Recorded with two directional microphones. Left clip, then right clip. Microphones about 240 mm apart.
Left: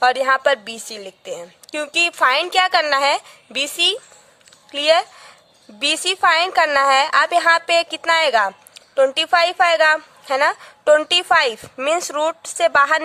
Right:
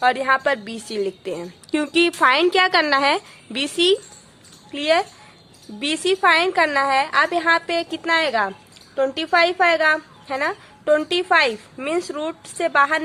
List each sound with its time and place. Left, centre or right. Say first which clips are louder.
0.0 s a woman's voice: left 2 dB; left